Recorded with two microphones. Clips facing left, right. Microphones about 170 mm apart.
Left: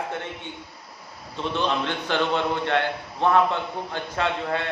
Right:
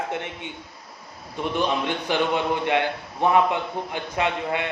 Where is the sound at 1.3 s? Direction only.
15° right (ahead or behind).